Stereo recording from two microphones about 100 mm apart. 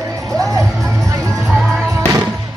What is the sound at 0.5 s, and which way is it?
Music, 10° left (ahead or behind).